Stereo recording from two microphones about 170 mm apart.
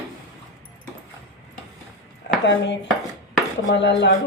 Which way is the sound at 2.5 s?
90° left.